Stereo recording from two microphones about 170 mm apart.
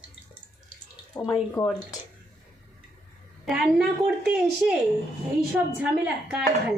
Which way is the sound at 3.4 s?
5° right (ahead or behind).